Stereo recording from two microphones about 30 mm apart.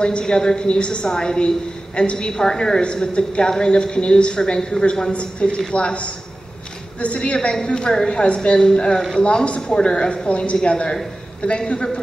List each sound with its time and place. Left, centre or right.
0.2 s a woman's voice: centre
0.6 s a woman's voice: left
2.8 s a woman's voice: left
5.1 s a woman's voice: left
7.6 s a woman's voice: left
9.6 s a woman's voice: left